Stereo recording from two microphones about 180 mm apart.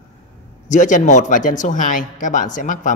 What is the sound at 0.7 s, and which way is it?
Speech, 45° left (ahead or behind).